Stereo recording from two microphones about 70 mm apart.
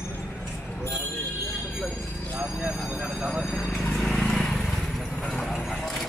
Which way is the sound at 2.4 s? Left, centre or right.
Centre.